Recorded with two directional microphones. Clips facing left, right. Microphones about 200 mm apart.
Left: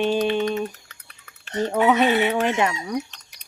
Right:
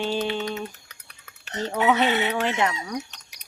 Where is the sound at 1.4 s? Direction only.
5° left (ahead or behind).